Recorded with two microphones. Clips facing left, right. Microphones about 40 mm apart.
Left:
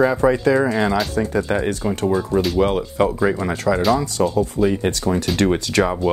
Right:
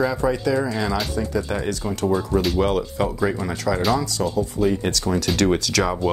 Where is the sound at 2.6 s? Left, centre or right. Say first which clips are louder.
Left 3 dB; centre.